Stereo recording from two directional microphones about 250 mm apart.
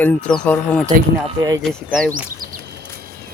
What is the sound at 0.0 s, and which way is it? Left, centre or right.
Speech, centre.